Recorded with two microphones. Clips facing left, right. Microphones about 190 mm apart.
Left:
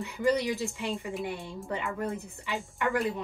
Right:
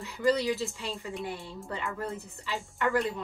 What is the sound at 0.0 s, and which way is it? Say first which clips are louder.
A woman's voice: even; 15° left (ahead or behind).